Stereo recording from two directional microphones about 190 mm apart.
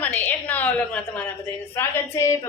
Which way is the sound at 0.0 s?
10° left (ahead or behind).